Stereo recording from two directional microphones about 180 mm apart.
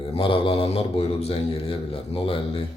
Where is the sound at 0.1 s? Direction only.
30° left (ahead or behind).